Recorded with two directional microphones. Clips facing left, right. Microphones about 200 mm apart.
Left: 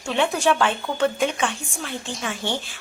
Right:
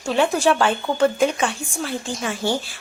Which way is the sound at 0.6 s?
40° right (ahead or behind).